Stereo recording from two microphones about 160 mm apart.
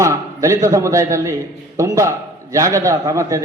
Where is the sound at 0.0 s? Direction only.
20° right (ahead or behind).